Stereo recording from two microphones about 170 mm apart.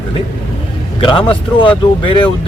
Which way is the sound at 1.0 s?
30° left (ahead or behind).